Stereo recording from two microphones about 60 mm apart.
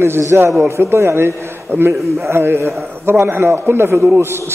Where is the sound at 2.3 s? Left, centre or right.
Right.